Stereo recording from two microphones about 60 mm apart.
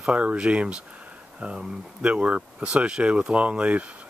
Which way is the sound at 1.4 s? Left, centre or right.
Centre.